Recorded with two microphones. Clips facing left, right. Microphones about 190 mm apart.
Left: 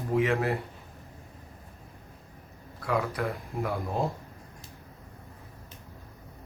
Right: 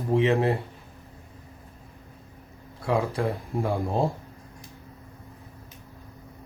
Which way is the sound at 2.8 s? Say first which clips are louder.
Right 4 dB; 25° right (ahead or behind).